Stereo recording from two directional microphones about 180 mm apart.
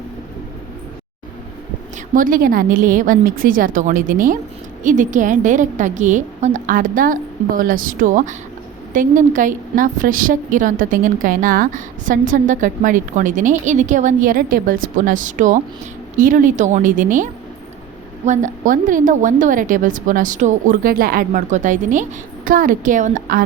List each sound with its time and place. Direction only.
2.1 s a woman's voice: 50° right (ahead or behind)
18.3 s a woman's voice: 45° right (ahead or behind)